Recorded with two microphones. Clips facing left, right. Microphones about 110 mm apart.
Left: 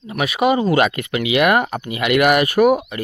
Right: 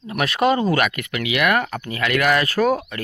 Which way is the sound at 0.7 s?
25° left (ahead or behind).